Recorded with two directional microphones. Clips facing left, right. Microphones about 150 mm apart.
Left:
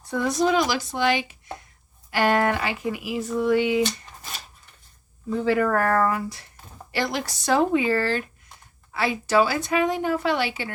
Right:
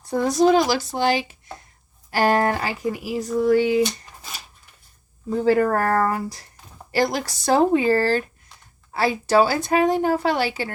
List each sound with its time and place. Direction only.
0.0 s speech: 35° right (ahead or behind)
4.2 s a sound: 5° right (ahead or behind)
5.3 s speech: 40° right (ahead or behind)